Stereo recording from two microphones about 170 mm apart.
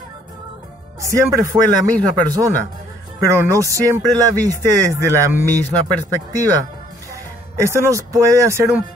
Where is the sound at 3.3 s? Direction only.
15° right (ahead or behind).